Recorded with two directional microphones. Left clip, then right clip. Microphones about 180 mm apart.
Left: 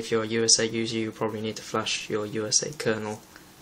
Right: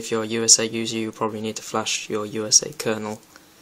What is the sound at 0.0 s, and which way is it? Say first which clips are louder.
Speech: right 2 dB; 45° right (ahead or behind).